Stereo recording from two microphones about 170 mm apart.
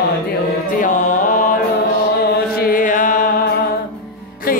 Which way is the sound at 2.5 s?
55° left (ahead or behind).